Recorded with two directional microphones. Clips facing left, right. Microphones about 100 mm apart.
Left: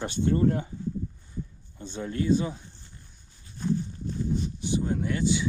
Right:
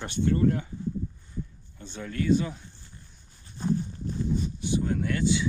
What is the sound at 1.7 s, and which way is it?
Speech, 30° left (ahead or behind).